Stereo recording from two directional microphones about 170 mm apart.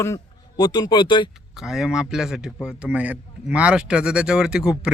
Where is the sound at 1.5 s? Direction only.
Centre (ahead or behind).